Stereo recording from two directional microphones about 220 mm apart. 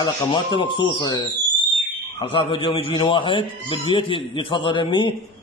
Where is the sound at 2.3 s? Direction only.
25° left (ahead or behind).